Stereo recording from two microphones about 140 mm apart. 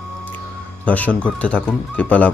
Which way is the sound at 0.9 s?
10° left (ahead or behind).